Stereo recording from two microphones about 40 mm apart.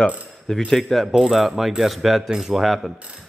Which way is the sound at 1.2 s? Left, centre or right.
Centre.